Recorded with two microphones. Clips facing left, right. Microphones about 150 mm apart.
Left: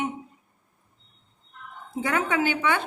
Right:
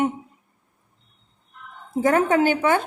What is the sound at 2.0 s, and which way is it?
Speech, 40° right (ahead or behind).